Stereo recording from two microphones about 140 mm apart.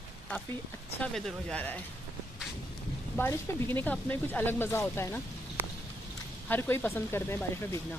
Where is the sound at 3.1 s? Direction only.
15° left (ahead or behind).